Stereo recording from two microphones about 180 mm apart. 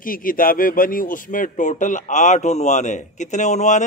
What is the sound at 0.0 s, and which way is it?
Speech, 50° left (ahead or behind).